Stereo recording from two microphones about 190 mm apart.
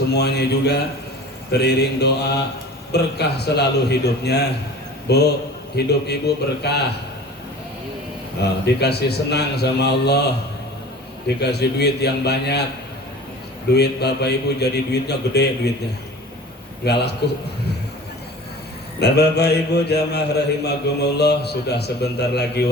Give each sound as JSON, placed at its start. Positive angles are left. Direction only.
{"t": 0.1, "sound": "a man's voice", "side_deg": 60}
{"t": 8.6, "sound": "a man's voice", "side_deg": 60}
{"t": 11.3, "sound": "a man's voice", "side_deg": 60}
{"t": 13.7, "sound": "a man's voice", "side_deg": 60}
{"t": 16.8, "sound": "a man's voice", "side_deg": 60}
{"t": 18.9, "sound": "a man's voice", "side_deg": 60}